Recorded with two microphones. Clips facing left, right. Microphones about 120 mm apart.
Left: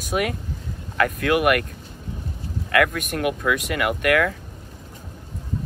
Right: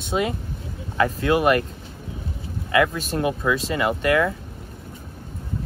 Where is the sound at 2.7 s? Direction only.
25° right (ahead or behind).